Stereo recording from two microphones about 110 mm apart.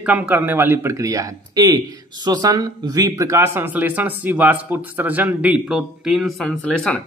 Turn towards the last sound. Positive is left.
turn(degrees=10)  # may be behind; listen again after turning